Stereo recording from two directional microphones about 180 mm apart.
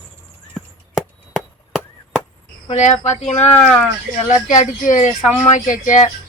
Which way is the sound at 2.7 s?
40° left (ahead or behind).